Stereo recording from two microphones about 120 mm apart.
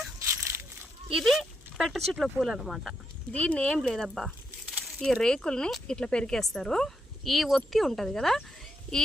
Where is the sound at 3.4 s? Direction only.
10° left (ahead or behind).